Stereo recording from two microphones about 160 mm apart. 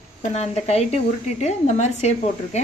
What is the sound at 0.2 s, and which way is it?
A woman's voice, 45° left (ahead or behind).